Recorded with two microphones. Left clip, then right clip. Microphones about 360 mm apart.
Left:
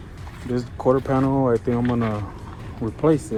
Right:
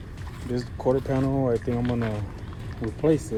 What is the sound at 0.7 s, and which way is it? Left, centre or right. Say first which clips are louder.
Speech: left 5 dB; left.